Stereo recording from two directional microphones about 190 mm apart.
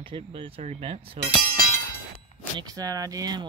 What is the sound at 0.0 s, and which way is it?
Speech, 25° right (ahead or behind).